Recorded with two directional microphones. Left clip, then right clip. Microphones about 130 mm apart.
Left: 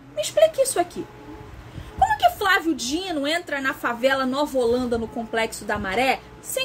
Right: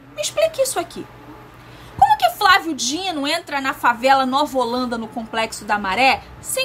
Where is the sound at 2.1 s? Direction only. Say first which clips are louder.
Right 4 dB; 30° right (ahead or behind).